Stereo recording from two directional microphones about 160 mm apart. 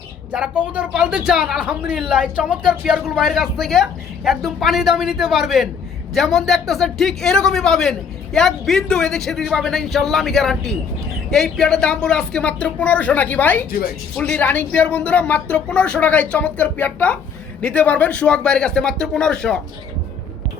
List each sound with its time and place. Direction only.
0.3 s speech: 5° right (ahead or behind); by 13.7 s 10° left (ahead or behind)
13.7 s speech: 65° left (ahead or behind)
14.2 s speech: 10° left (ahead or behind)